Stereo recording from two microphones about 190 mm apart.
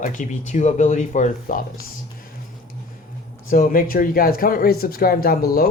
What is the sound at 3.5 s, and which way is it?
A man's voice, 45° left (ahead or behind).